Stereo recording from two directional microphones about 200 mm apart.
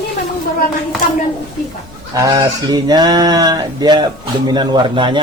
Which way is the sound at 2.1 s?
20° right (ahead or behind).